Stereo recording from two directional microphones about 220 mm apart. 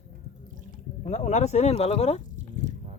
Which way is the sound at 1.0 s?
30° left (ahead or behind).